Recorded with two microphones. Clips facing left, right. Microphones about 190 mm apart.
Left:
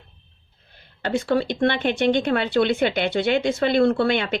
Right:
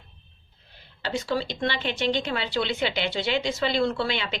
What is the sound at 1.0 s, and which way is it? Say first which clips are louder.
Speech: left 6 dB; 55° left (ahead or behind).